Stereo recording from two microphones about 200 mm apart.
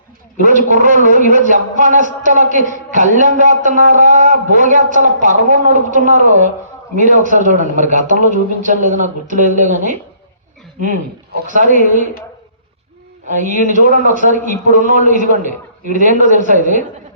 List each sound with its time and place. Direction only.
0.3 s a man's voice: 40° right (ahead or behind)
13.3 s a man's voice: 40° right (ahead or behind)